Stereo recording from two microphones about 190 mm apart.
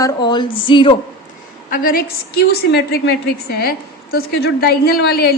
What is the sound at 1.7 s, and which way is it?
A woman's voice, 50° left (ahead or behind).